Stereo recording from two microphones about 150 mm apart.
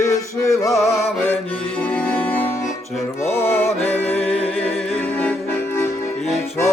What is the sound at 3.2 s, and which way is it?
Music, 15° left (ahead or behind).